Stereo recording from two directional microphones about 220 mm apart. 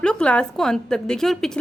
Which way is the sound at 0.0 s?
5° left (ahead or behind).